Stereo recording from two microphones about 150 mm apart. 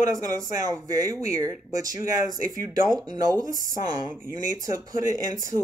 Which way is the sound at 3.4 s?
60° right (ahead or behind).